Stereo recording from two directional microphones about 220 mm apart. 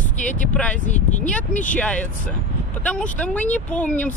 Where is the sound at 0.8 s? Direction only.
35° left (ahead or behind).